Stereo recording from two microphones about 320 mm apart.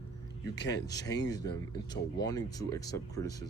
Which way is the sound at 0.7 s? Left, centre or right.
Centre.